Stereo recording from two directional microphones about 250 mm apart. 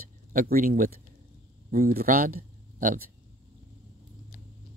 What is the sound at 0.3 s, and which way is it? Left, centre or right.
Speech, right.